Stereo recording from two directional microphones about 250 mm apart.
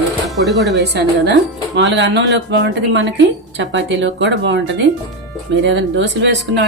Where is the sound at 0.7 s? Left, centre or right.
Right.